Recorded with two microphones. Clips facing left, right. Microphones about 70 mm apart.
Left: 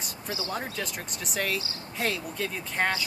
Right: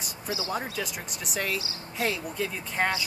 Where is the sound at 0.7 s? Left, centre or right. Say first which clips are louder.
Right 1 dB; centre.